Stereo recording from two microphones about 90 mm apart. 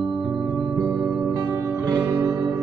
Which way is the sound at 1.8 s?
50° right (ahead or behind).